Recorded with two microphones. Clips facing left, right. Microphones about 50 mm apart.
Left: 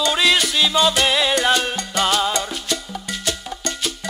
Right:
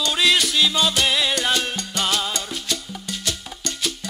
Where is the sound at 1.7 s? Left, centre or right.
Centre.